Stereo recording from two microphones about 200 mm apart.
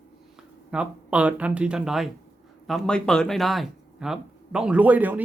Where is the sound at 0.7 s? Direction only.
5° right (ahead or behind).